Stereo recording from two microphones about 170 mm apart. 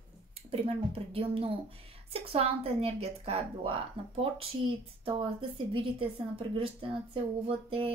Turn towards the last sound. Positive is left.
turn(degrees=-35)  # may be behind; listen again after turning